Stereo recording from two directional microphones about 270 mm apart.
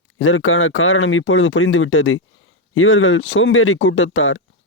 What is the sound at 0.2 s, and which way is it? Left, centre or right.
Speech, left.